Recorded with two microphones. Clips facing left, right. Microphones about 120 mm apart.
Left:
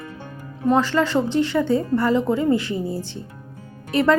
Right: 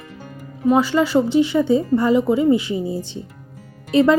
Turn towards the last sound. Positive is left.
turn(degrees=-15)  # may be behind; listen again after turning